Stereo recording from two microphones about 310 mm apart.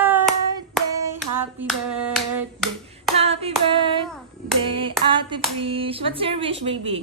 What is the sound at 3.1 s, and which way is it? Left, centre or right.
Hands, centre.